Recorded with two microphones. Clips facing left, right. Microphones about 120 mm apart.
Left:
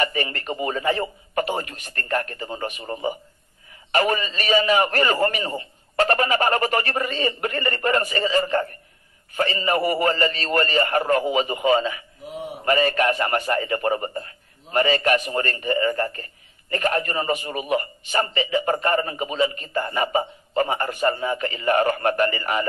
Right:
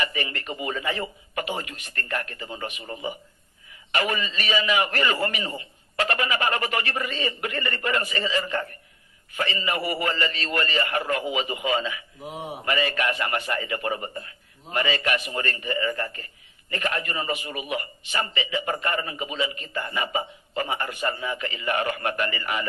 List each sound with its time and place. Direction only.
0.0 s a man's voice: 40° left (ahead or behind)